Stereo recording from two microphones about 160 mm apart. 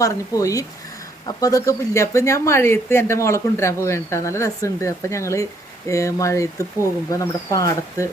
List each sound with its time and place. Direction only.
0.0 s speech: 20° left (ahead or behind)